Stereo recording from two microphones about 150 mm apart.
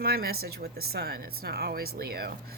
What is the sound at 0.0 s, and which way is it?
Speech, 90° right.